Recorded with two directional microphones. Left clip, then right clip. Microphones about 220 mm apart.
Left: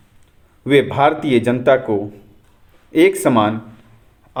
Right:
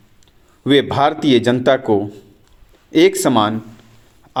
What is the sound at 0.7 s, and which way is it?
Speech, 40° right (ahead or behind).